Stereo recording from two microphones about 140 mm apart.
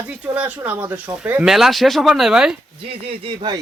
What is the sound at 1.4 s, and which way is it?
A man's voice, centre (ahead or behind).